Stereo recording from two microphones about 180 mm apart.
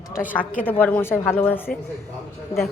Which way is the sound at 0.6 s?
10° left (ahead or behind).